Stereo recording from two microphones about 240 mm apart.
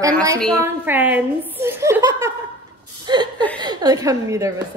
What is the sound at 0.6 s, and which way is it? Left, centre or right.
A woman's voice, centre.